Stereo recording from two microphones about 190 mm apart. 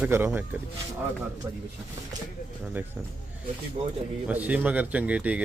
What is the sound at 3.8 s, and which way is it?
Speech, 30° right (ahead or behind).